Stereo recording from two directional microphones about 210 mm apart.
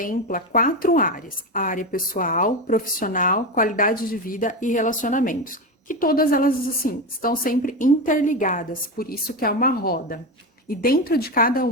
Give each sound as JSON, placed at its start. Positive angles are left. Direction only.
{"t": 0.0, "sound": "a woman's voice", "side_deg": 40}